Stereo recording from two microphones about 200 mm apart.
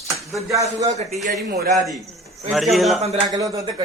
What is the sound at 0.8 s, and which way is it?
Speech, 35° right (ahead or behind).